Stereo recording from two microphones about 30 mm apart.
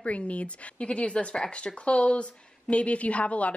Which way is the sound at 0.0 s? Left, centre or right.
Left.